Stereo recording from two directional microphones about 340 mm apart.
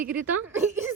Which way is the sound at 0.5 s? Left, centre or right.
Centre.